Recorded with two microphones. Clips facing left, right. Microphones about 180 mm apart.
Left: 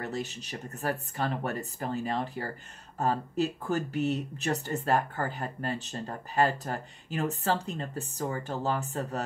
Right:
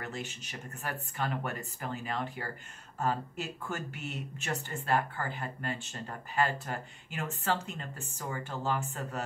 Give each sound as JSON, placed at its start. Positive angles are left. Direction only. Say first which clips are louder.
{"t": 0.0, "sound": "speech", "louder": "left 5 dB", "side_deg": 35}